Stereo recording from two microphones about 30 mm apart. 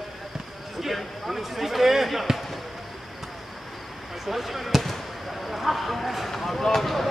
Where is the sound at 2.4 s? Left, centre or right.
Centre.